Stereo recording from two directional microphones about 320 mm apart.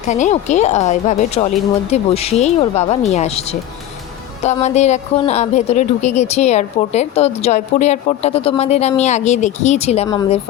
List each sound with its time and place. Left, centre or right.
0.1 s speech: left
4.4 s speech: left